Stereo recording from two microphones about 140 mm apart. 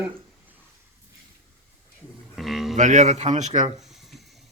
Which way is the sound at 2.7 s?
60° right (ahead or behind).